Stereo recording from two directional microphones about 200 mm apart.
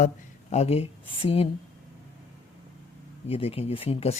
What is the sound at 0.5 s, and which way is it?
Speech, 30° left (ahead or behind).